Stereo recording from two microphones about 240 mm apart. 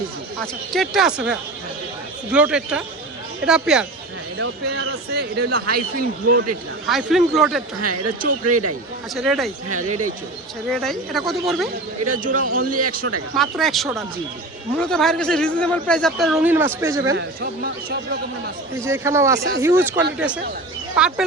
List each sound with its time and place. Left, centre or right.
0.7 s a man's voice: centre
5.1 s speech: right
6.8 s a man's voice: centre
7.8 s speech: right
9.1 s a man's voice: centre
10.7 s a man's voice: centre
12.2 s speech: right
13.3 s a man's voice: centre
17.2 s speech: right
18.8 s a man's voice: centre